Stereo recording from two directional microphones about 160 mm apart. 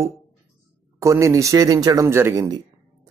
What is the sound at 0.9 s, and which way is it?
A man's voice, 20° right (ahead or behind).